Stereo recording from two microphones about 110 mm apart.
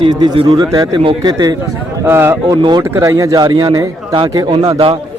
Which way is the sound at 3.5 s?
50° right (ahead or behind).